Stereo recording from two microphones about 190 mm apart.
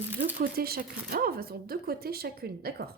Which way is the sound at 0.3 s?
50° right (ahead or behind).